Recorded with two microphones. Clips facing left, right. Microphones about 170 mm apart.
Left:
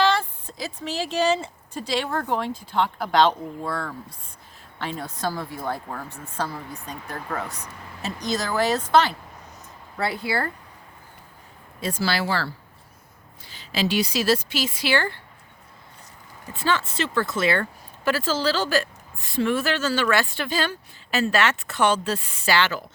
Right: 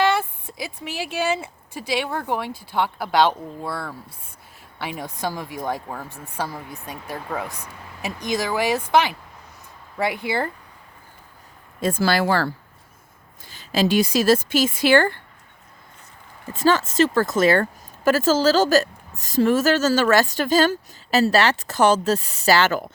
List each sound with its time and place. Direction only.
0.0 s speech: 10° right (ahead or behind)
11.8 s a woman's voice: 50° right (ahead or behind)
16.5 s a woman's voice: 40° right (ahead or behind)